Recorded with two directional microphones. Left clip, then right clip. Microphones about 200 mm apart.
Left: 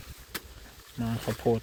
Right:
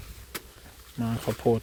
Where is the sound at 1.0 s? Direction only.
15° right (ahead or behind).